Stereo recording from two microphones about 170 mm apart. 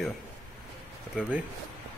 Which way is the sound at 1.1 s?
5° right (ahead or behind).